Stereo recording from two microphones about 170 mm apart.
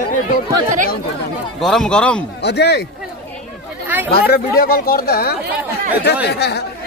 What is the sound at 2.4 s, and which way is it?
Speech, 80° left.